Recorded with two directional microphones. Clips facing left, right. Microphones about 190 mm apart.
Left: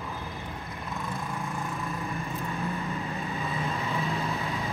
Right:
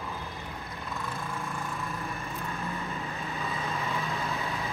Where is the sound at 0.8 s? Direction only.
15° left (ahead or behind).